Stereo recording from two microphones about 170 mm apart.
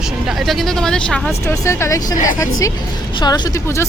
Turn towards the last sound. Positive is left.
turn(degrees=15)  # may be behind; listen again after turning